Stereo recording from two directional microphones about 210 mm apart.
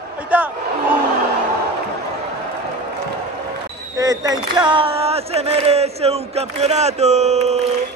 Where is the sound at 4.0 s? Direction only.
15° right (ahead or behind).